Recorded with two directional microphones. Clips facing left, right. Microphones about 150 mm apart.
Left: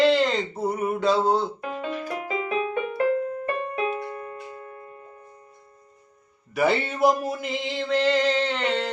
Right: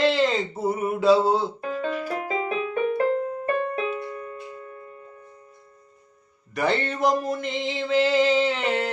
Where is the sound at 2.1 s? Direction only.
35° right (ahead or behind).